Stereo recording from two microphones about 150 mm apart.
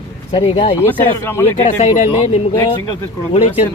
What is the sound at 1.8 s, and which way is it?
Speech, 50° left (ahead or behind).